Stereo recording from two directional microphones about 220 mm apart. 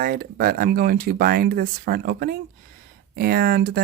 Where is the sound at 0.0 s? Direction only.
45° right (ahead or behind).